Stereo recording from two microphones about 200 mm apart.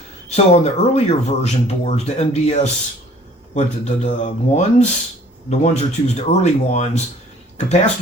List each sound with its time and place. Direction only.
0.3 s speech: 30° left (ahead or behind)